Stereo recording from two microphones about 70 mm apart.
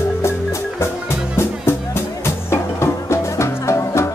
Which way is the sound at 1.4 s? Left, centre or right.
Left.